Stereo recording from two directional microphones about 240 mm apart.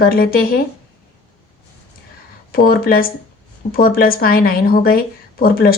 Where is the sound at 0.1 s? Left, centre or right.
Left.